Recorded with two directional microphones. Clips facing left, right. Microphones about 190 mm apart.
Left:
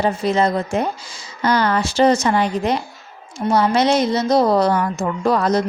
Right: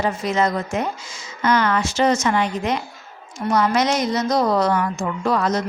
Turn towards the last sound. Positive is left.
turn(degrees=35)  # may be behind; listen again after turning